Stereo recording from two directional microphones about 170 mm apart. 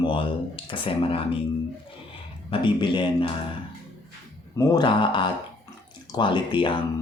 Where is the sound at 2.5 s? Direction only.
30° left (ahead or behind).